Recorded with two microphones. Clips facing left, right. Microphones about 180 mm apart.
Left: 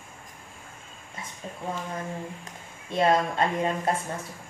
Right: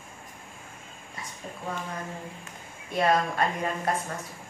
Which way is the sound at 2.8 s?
25° left (ahead or behind).